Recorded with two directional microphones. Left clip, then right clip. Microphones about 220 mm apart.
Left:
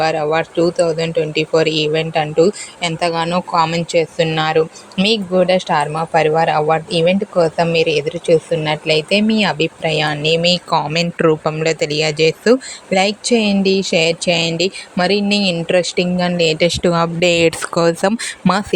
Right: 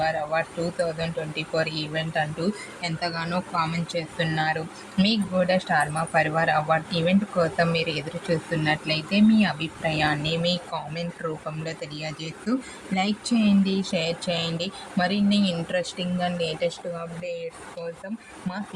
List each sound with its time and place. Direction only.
0.0 s speech: 35° left (ahead or behind)